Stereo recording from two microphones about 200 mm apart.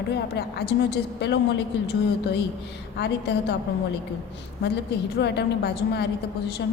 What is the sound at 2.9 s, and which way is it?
Speech, 55° left (ahead or behind).